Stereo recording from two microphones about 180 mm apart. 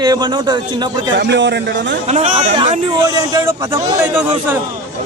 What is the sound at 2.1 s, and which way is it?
Speech, 40° right (ahead or behind).